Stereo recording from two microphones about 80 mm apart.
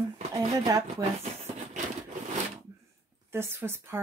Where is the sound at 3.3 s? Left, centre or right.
Right.